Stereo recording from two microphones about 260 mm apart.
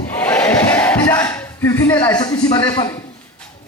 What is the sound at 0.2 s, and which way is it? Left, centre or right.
Crowd, centre.